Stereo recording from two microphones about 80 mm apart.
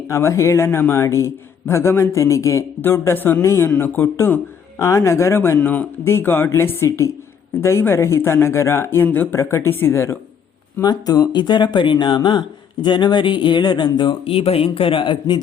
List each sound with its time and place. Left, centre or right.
0.1 s a man's voice: left
2.8 s a man's voice: left
3.7 s speech: left
4.8 s a man's voice: left
5.5 s speech: centre
6.1 s a man's voice: left
9.3 s a man's voice: left
10.8 s speech: left
14.8 s a man's voice: left